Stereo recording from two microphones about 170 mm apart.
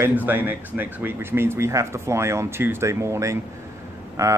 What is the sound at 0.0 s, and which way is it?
Speech, 10° right (ahead or behind).